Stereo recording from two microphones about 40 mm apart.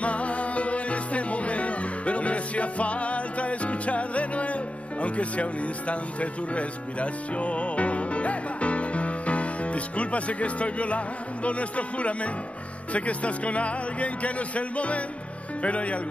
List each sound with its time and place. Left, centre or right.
0.0 s music: left
5.0 s speech: left